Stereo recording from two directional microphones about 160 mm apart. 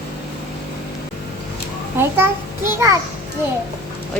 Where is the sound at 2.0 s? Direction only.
15° right (ahead or behind).